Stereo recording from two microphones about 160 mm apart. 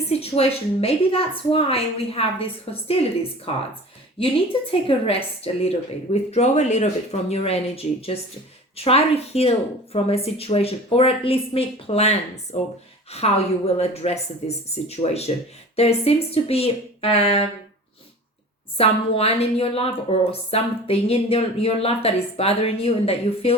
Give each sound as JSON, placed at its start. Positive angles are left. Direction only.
{"t": 0.1, "sound": "a woman's voice", "side_deg": 40}
{"t": 18.8, "sound": "a woman's voice", "side_deg": 40}